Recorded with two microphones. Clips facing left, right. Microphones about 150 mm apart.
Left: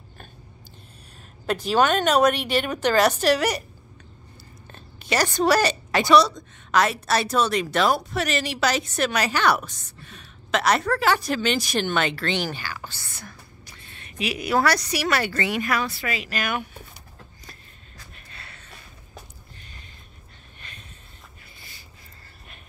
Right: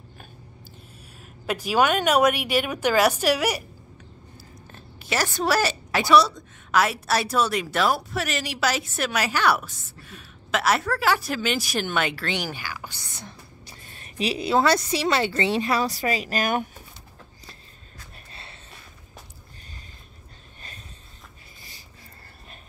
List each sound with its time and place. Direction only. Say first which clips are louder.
1.4 s a woman's voice: left 1 dB; 10° right (ahead or behind)
4.7 s a woman's voice: left 3 dB; 5° right (ahead or behind); by 13.7 s 25° right (ahead or behind)
13.8 s a woman's voice: right 2 dB; 40° right (ahead or behind)
18.3 s a sound: right 1 dB; 30° right (ahead or behind)